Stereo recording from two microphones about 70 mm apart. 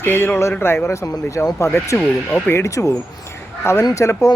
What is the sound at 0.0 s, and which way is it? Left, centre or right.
Speech, left.